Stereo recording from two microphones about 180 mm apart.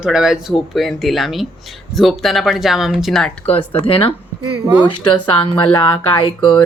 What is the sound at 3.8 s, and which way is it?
Speech, 30° left (ahead or behind).